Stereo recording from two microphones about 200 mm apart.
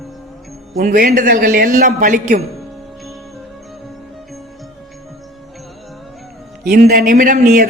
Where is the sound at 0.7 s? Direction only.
45° right (ahead or behind).